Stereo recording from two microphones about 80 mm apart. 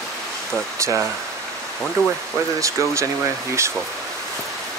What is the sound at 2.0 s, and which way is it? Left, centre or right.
Speech, right.